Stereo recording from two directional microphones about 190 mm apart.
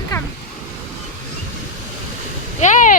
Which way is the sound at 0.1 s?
20° left (ahead or behind).